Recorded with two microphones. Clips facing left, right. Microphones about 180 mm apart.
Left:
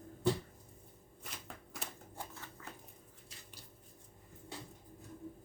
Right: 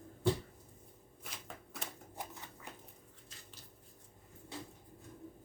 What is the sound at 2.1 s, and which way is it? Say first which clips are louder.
Shuffling cards: right 1 dB; 15° right (ahead or behind).